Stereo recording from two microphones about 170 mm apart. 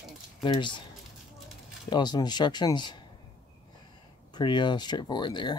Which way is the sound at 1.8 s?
25° left (ahead or behind).